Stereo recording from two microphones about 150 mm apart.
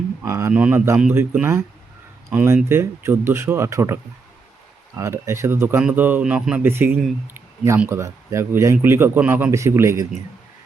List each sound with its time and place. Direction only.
0.2 s speech: 15° right (ahead or behind)
7.3 s a sound: 20° right (ahead or behind)
7.8 s speech: 15° right (ahead or behind)